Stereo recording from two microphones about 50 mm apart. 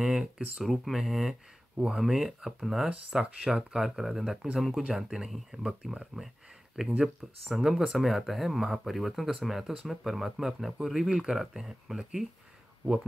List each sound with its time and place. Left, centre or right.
0.0 s a sound: centre
0.6 s speech: centre
6.1 s speech: centre
7.0 s speech: centre